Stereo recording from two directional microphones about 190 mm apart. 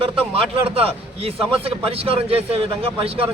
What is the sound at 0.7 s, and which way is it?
A man's voice, 30° right (ahead or behind).